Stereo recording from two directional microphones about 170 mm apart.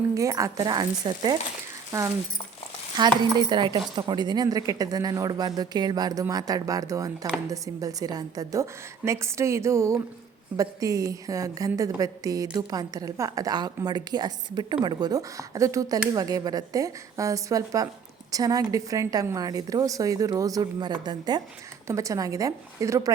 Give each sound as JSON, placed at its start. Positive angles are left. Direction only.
{"t": 0.1, "sound": "a woman's voice", "side_deg": -20}
{"t": 3.0, "sound": "a woman's voice", "side_deg": -25}